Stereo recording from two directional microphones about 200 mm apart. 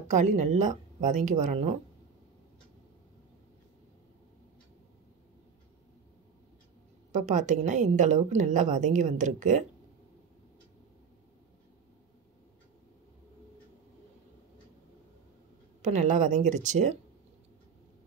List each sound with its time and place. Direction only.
0.1 s a woman's voice: 35° right (ahead or behind)
7.1 s a woman's voice: 40° right (ahead or behind)
15.8 s a woman's voice: 35° right (ahead or behind)